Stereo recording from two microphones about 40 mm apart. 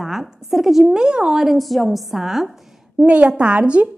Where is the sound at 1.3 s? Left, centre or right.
Centre.